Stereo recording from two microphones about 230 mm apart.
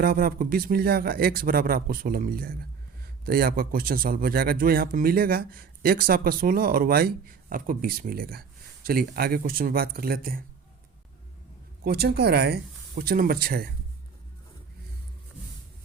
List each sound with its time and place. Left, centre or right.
0.0 s a man's voice: right
11.8 s a man's voice: right